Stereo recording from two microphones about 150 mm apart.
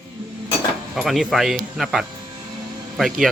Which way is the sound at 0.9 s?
Centre (ahead or behind).